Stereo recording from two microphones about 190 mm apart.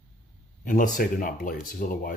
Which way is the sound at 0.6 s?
45° left (ahead or behind).